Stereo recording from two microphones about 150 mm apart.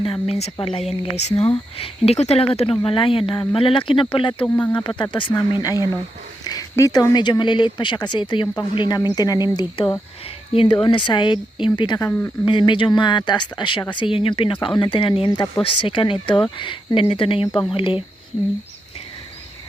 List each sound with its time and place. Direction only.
0.0 s a woman's voice: 40° left (ahead or behind)
4.4 s speech: 10° left (ahead or behind)
4.7 s speech: 30° left (ahead or behind)
12.0 s speech: 10° left (ahead or behind)
12.5 s speech: 30° left (ahead or behind)